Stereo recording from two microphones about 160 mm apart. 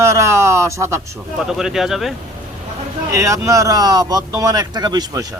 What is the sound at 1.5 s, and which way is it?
Speech, 5° right (ahead or behind).